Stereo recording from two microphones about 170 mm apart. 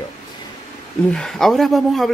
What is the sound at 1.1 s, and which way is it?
Speech, 5° left (ahead or behind).